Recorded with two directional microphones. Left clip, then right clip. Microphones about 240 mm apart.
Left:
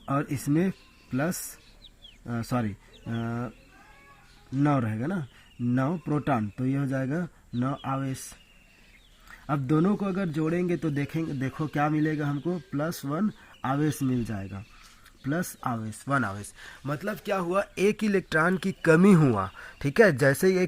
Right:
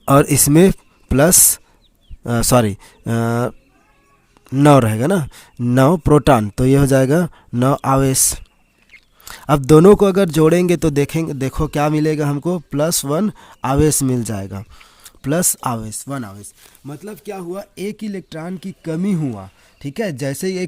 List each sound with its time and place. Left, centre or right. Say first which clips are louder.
0.0 s speech: right 17 dB; right
4.5 s speech: right 15 dB; right
16.8 s speech: right 1 dB; centre